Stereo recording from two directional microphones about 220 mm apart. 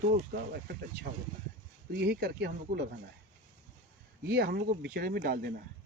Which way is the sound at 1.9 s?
50° right (ahead or behind).